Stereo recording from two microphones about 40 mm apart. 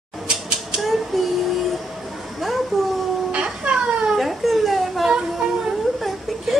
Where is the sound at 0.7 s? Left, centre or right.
Centre.